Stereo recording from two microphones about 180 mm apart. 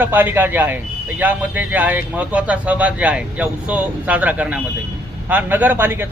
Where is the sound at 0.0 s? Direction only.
10° right (ahead or behind).